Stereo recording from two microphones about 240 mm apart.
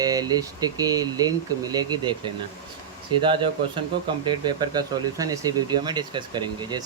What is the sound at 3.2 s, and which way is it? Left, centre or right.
Speech, right.